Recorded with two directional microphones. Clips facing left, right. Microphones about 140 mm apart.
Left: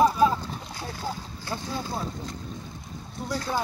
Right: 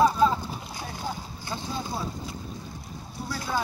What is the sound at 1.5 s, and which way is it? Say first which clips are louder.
Speech: left 2 dB; 15° right (ahead or behind).